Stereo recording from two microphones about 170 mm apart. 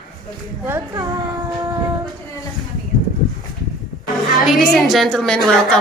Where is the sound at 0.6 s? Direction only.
15° right (ahead or behind).